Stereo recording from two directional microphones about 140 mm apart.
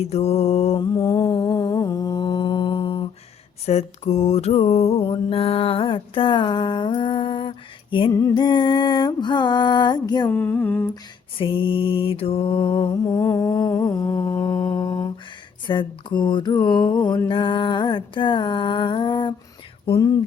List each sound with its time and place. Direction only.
0.0 s mantra: 50° left (ahead or behind)
0.8 s a sound: 25° left (ahead or behind)
3.7 s mantra: 50° left (ahead or behind); by 10.2 s 30° left (ahead or behind)
10.2 s a sound: 10° left (ahead or behind)
11.3 s mantra: 40° left (ahead or behind)
13.2 s humming: 20° left (ahead or behind)
14.4 s music: 30° left (ahead or behind)
15.6 s mantra: 35° left (ahead or behind)